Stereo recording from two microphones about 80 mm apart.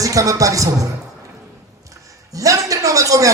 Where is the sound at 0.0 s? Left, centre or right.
Right.